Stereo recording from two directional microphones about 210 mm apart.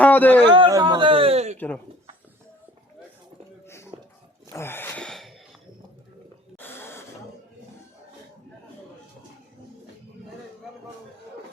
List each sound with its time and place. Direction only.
0.0 s a man's voice: 10° left (ahead or behind)
0.4 s a sound: 20° right (ahead or behind)
1.5 s speech: 10° left (ahead or behind)
3.9 s dog: 25° right (ahead or behind)
4.5 s gasp: 10° left (ahead or behind)
6.6 s a sound: 10° left (ahead or behind)